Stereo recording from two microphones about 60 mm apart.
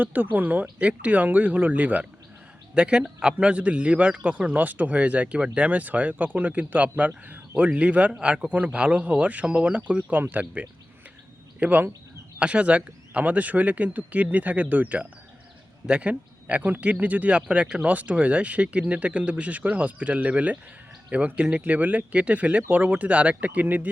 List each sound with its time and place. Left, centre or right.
0.0 s a man's voice: right
10.2 s a man's voice: right